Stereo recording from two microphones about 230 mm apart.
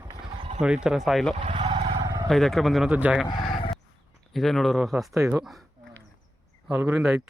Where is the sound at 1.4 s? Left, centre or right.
Right.